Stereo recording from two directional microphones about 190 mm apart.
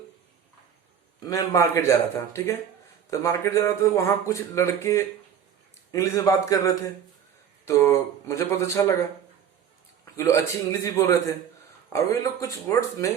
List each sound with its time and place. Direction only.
1.2 s speech: 20° left (ahead or behind)
10.2 s speech: 15° left (ahead or behind)